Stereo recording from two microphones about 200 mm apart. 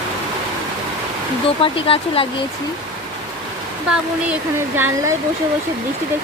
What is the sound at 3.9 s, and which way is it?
Speech, 5° right (ahead or behind).